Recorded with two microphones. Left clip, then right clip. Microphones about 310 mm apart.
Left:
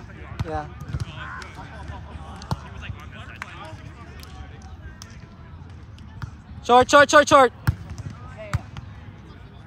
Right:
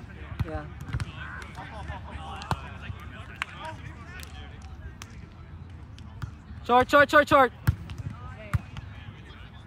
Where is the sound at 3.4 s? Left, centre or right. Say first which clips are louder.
Right 3 dB; right.